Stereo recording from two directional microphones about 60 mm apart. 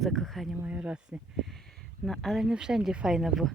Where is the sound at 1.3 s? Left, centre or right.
Centre.